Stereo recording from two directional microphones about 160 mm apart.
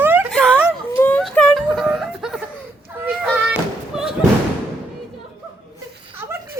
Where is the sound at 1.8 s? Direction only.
Centre (ahead or behind).